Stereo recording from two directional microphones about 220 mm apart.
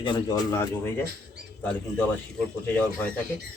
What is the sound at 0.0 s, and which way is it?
Speech, 20° left (ahead or behind).